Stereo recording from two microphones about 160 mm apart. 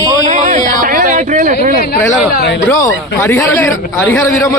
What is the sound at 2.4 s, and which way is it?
Speech, 90° left.